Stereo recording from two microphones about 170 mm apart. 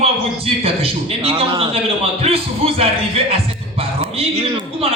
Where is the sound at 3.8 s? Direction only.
35° right (ahead or behind).